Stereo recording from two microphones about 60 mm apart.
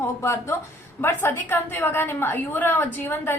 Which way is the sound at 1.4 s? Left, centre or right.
Left.